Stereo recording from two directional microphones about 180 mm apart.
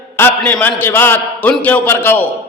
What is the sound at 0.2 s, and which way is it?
A man's voice, 10° left (ahead or behind).